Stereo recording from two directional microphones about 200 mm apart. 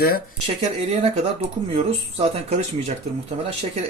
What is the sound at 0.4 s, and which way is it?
Speech, 30° right (ahead or behind).